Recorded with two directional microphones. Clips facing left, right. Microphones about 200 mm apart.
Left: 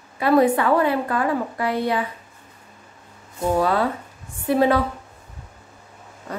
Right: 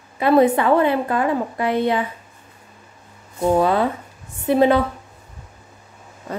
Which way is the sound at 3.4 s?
20° right (ahead or behind).